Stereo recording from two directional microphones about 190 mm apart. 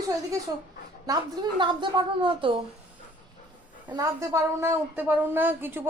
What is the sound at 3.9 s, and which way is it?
A woman's voice, 15° right (ahead or behind).